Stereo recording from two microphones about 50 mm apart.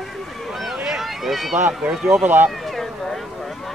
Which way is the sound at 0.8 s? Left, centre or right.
Centre.